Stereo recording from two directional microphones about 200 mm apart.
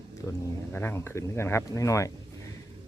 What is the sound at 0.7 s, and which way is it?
Speech, 10° left (ahead or behind).